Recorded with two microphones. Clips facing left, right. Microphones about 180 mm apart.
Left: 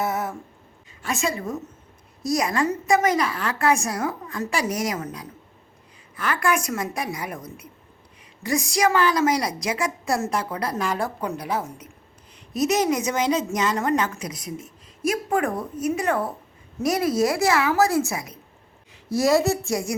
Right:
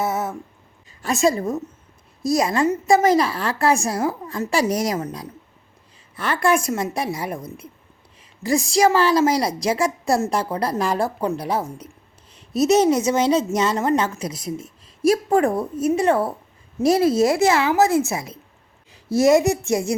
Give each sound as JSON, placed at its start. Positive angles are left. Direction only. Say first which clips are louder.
{"t": 0.0, "sound": "a sound", "louder": "right 2 dB", "side_deg": -20}
{"t": 1.0, "sound": "a woman's voice", "louder": "right 7 dB", "side_deg": -40}
{"t": 2.2, "sound": "a woman's voice", "louder": "right 4 dB", "side_deg": -25}
{"t": 6.1, "sound": "a woman's voice", "louder": "right 4 dB", "side_deg": -30}
{"t": 8.4, "sound": "a woman's voice", "louder": "right 4 dB", "side_deg": -30}